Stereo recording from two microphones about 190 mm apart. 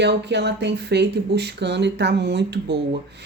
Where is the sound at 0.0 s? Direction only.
65° right (ahead or behind).